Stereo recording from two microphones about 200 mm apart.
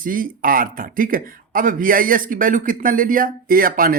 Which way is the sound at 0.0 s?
45° right (ahead or behind).